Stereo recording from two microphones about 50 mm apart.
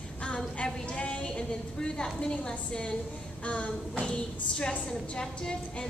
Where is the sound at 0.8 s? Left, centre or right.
Left.